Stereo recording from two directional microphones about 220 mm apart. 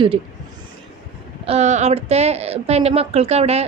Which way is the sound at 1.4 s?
30° right (ahead or behind).